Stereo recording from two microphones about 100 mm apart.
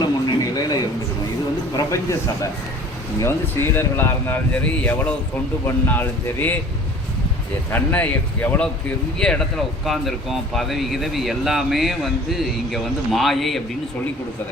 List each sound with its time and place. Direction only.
0.0 s a sound: 45° left (ahead or behind)
1.7 s speech: 35° left (ahead or behind)
7.7 s speech: 20° left (ahead or behind); by 13.6 s centre (ahead or behind)